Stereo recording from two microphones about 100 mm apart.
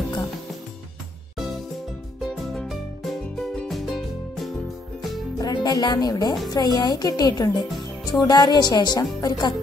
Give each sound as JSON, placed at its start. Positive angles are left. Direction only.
{"t": 2.2, "sound": "music", "side_deg": 0}
{"t": 5.4, "sound": "speech", "side_deg": 45}